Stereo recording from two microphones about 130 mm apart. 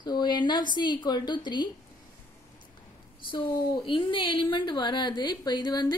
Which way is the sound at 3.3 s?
40° left (ahead or behind).